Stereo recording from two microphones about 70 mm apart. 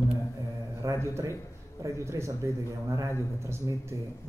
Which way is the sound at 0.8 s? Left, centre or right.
Right.